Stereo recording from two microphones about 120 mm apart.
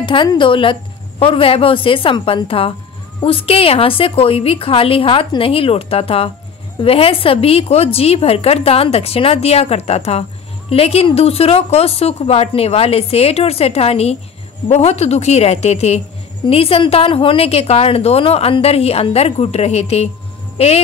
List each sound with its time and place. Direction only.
0.0 s a woman's voice: 45° left (ahead or behind)